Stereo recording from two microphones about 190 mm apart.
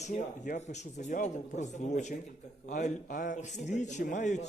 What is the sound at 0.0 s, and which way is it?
A man's voice, 40° left (ahead or behind).